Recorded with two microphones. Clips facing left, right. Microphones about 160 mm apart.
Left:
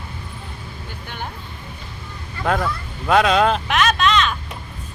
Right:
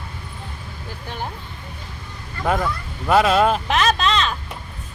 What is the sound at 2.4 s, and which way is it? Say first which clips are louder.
Speech: even; 5° right (ahead or behind).